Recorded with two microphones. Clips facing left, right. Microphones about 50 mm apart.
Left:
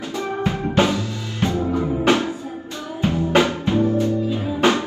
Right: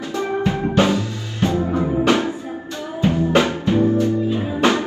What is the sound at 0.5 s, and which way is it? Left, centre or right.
Drum, right.